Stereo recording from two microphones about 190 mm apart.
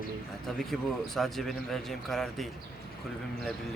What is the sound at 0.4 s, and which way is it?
A man's voice, centre (ahead or behind).